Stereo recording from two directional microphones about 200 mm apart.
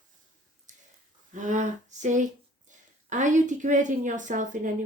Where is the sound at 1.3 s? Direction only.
40° right (ahead or behind).